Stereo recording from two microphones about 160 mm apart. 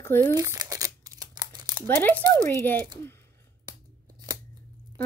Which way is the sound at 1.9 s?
10° left (ahead or behind).